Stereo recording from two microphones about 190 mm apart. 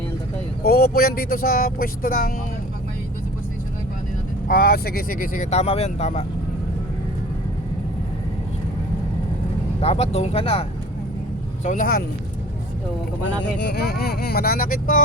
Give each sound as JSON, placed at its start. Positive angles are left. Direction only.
{"t": 0.6, "sound": "speech", "side_deg": 55}
{"t": 4.4, "sound": "speech", "side_deg": 50}
{"t": 9.8, "sound": "speech", "side_deg": 35}
{"t": 11.6, "sound": "speech", "side_deg": 45}
{"t": 13.4, "sound": "speech", "side_deg": 65}